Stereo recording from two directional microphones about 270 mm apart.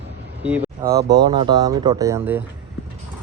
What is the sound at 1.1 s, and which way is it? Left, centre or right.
Speech, centre.